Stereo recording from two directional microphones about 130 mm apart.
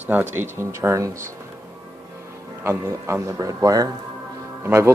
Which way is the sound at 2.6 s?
20° right (ahead or behind).